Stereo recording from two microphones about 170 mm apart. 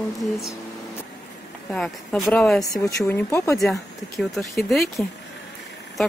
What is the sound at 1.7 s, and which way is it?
Speech, centre (ahead or behind).